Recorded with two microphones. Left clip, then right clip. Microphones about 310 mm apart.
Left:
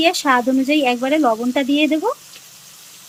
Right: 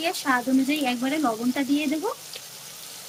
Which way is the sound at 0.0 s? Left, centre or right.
Left.